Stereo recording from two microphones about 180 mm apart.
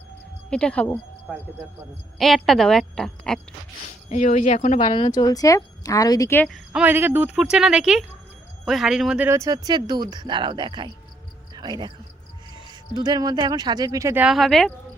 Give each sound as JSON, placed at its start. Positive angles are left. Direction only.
{"t": 0.5, "sound": "speech", "side_deg": 5}
{"t": 1.3, "sound": "speech", "side_deg": -5}
{"t": 4.1, "sound": "speech", "side_deg": 40}
{"t": 5.0, "sound": "speech", "side_deg": 20}
{"t": 6.7, "sound": "speech", "side_deg": -10}
{"t": 13.0, "sound": "speech", "side_deg": -20}
{"t": 14.3, "sound": "speech", "side_deg": 0}